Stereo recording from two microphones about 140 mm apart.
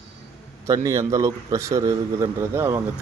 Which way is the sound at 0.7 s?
20° right (ahead or behind).